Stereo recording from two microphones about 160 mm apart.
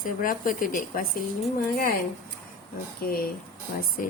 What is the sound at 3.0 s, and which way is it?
Speech, 70° left (ahead or behind).